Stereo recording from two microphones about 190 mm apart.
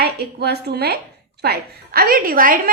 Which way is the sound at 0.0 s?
60° right (ahead or behind).